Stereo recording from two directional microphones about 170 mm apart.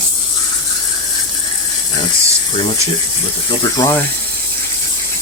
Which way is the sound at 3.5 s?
20° left (ahead or behind).